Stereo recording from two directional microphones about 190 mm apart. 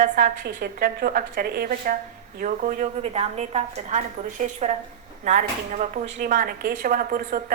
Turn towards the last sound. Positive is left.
turn(degrees=-50)  # may be behind; listen again after turning